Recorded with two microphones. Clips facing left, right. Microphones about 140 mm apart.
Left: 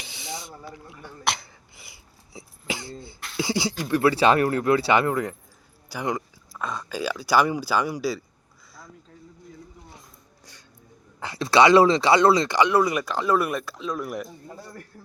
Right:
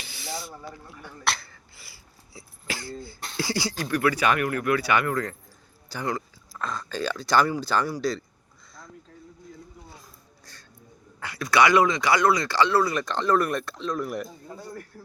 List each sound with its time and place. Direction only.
0.0 s hiccup: 20° left (ahead or behind)
3.3 s speech: 20° left (ahead or behind)
9.9 s a sound: 20° left (ahead or behind)
11.2 s speech: 25° left (ahead or behind); by 14.3 s centre (ahead or behind)